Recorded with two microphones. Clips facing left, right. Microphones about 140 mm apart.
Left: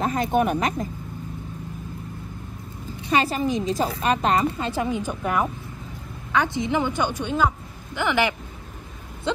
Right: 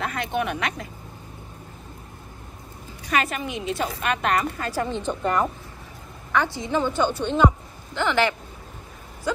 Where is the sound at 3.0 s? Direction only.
30° left (ahead or behind).